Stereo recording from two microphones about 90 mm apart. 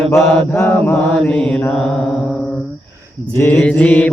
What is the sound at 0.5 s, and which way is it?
Mantra, 25° left (ahead or behind).